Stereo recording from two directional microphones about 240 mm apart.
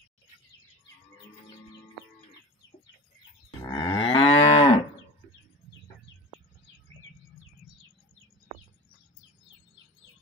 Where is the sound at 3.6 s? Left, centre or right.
Centre.